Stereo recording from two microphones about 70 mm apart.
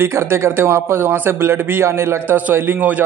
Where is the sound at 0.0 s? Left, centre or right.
Right.